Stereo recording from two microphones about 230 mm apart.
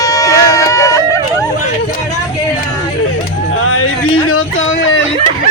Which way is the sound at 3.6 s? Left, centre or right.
Left.